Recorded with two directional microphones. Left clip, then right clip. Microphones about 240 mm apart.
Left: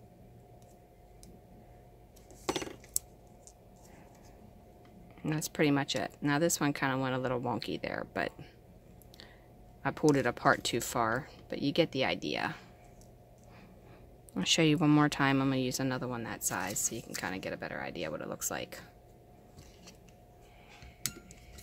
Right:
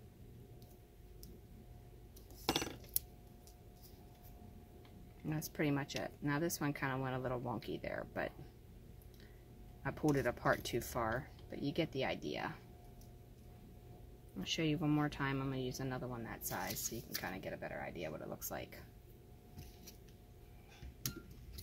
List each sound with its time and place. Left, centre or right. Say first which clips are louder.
2.4 s cutlery: left 2 dB; centre
5.2 s speech: left 9 dB; left
9.8 s speech: left 8 dB; left
14.3 s speech: left 11 dB; left